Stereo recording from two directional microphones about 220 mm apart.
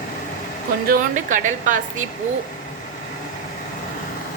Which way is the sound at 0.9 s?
35° right (ahead or behind).